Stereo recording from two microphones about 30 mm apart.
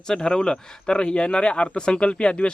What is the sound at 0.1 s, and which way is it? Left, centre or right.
Speech, left.